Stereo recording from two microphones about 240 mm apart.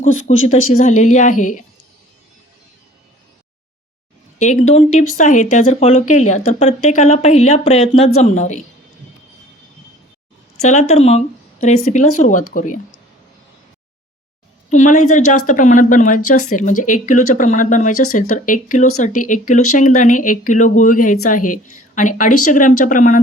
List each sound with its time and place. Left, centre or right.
0.0 s a woman's voice: left
4.4 s speech: left
10.6 s a woman's voice: left
14.7 s a woman's voice: left